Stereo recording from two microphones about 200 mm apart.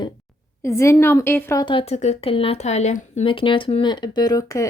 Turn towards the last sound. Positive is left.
turn(degrees=15)  # may be behind; listen again after turning